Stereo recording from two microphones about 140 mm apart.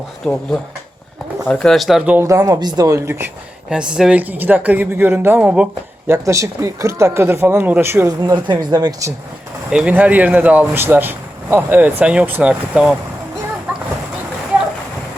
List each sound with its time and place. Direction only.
1.5 s speech: 5° left (ahead or behind)
2.2 s speech: 25° right (ahead or behind)
3.7 s speech: 5° right (ahead or behind)
6.1 s speech: 20° right (ahead or behind)
9.7 s speech: 10° right (ahead or behind)